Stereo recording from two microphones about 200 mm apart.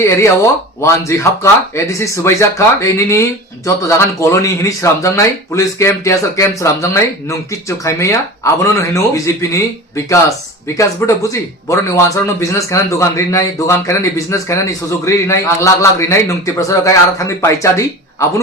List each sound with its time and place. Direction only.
0.0 s speech: 15° left (ahead or behind)